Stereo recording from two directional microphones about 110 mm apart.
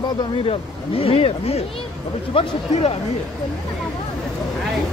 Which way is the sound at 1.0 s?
60° left (ahead or behind).